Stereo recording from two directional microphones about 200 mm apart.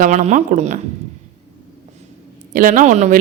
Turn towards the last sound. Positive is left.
turn(degrees=-35)  # may be behind; listen again after turning